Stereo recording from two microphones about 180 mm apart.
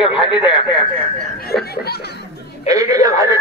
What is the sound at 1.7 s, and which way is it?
Speech, 60° left (ahead or behind).